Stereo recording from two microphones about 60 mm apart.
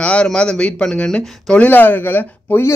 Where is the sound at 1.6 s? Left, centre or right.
Left.